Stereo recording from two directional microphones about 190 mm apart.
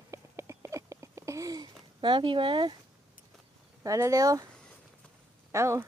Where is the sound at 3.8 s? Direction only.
15° right (ahead or behind).